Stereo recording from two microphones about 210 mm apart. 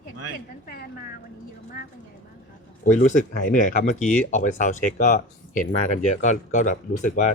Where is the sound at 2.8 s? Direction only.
40° left (ahead or behind).